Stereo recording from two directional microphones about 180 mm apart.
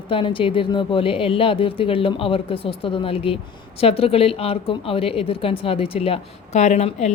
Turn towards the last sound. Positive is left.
turn(degrees=40)  # may be behind; listen again after turning